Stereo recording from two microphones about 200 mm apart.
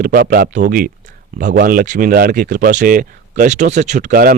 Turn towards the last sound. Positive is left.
turn(degrees=-45)  # may be behind; listen again after turning